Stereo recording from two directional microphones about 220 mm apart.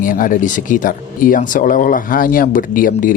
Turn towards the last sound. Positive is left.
turn(degrees=40)  # may be behind; listen again after turning